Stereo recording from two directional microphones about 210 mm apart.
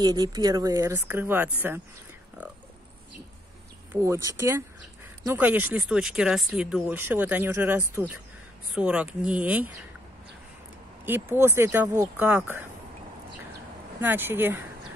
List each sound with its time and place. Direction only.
0.0 s speech: 20° right (ahead or behind)
3.9 s speech: 15° right (ahead or behind)
11.1 s speech: 10° right (ahead or behind)
14.0 s speech: 10° right (ahead or behind)